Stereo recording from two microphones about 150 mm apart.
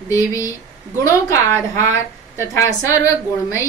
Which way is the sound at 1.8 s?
20° left (ahead or behind).